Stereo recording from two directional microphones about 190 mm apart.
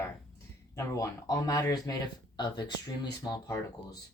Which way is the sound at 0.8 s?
15° left (ahead or behind).